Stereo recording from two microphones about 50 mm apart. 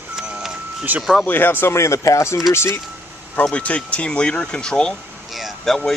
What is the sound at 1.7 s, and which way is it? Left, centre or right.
Speech, left.